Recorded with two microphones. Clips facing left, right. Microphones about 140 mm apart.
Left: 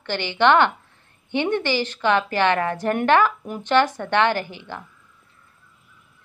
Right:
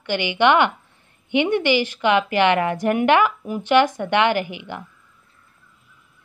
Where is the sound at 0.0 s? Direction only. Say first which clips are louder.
Right 1 dB; 15° right (ahead or behind).